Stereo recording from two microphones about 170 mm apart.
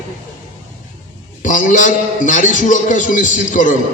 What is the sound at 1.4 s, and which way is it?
A man's voice, 50° left (ahead or behind).